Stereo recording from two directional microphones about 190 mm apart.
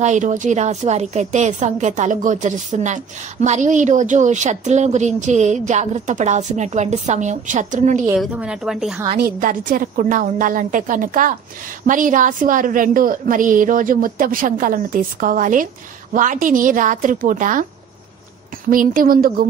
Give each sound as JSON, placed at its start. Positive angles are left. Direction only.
{"t": 0.0, "sound": "speech", "side_deg": -40}
{"t": 8.2, "sound": "speech", "side_deg": -5}
{"t": 9.1, "sound": "a woman's voice", "side_deg": -50}
{"t": 18.7, "sound": "a woman's voice", "side_deg": -45}